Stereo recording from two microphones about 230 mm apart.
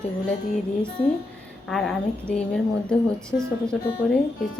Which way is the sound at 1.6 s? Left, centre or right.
Centre.